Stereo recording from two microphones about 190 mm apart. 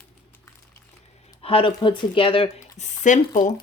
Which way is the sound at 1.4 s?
30° left (ahead or behind).